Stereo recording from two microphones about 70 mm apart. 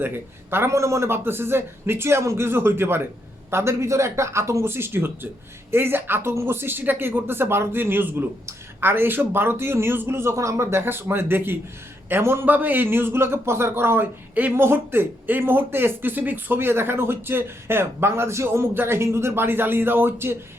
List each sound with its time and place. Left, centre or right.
0.5 s speech: right